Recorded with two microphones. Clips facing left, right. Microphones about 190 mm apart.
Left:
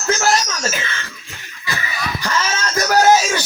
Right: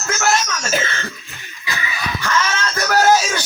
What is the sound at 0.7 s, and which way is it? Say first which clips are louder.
Speech: right 5 dB; 45° right (ahead or behind).